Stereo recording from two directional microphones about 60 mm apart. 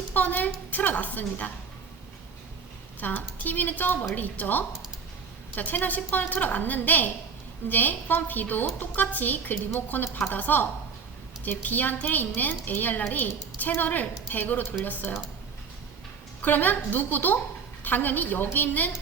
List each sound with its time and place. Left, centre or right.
0.1 s a woman's voice: left
3.0 s a woman's voice: left
16.4 s a woman's voice: left